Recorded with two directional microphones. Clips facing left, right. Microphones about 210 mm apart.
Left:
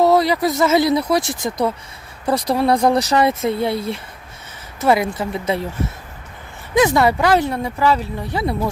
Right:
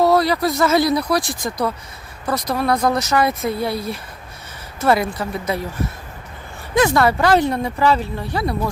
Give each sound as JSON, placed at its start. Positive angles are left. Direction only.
{"t": 0.0, "sound": "speech", "side_deg": 20}
{"t": 6.7, "sound": "speech", "side_deg": 20}
{"t": 7.2, "sound": "speech", "side_deg": 5}
{"t": 8.3, "sound": "speech", "side_deg": 20}